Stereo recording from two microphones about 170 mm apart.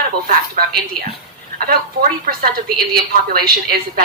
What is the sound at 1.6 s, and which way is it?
A woman's voice, 60° right (ahead or behind).